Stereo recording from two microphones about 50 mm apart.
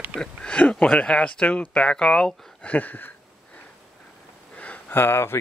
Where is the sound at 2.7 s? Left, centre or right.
Left.